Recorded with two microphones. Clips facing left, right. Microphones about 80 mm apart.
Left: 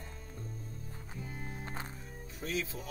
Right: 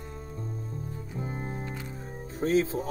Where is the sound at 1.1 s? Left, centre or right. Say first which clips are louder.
Right 9 dB; right.